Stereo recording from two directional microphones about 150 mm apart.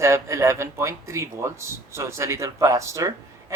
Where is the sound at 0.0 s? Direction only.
20° right (ahead or behind).